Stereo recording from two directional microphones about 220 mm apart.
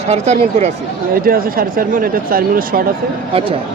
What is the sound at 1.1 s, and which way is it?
Speech, 40° right (ahead or behind).